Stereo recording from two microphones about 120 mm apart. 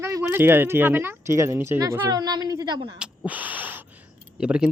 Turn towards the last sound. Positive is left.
turn(degrees=-10)  # may be behind; listen again after turning